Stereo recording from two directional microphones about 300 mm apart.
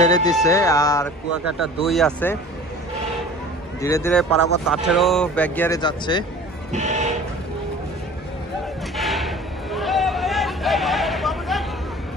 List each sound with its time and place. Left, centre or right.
0.1 s speech: centre
3.8 s speech: centre
6.7 s speech: right
8.9 s a sound: centre